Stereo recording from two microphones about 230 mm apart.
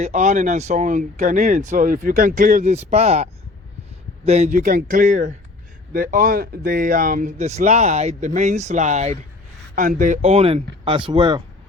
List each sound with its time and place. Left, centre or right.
0.0 s speech: right
4.3 s speech: right